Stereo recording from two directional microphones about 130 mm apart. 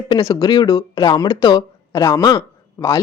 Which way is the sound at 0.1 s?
30° left (ahead or behind).